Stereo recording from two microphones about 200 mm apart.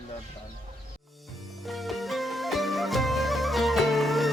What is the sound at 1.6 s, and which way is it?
Music, centre (ahead or behind).